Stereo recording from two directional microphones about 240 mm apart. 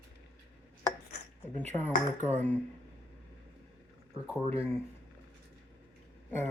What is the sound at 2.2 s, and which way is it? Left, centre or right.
Speech, right.